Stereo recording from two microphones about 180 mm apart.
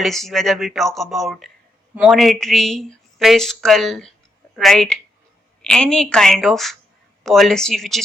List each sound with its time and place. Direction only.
0.0 s speech: centre (ahead or behind)